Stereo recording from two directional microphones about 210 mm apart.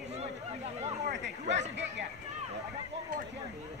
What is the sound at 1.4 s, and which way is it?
Chatter, 35° right (ahead or behind).